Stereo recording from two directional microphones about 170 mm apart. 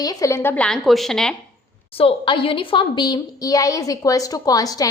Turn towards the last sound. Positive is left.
turn(degrees=20)  # may be behind; listen again after turning